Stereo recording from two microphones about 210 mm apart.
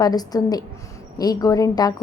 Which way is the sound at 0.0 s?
20° left (ahead or behind).